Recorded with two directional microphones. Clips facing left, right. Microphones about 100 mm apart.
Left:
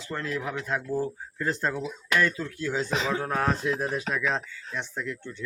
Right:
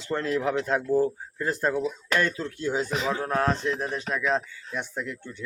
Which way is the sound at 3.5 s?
5° left (ahead or behind).